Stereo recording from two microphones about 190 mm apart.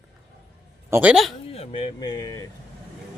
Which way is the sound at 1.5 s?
30° left (ahead or behind).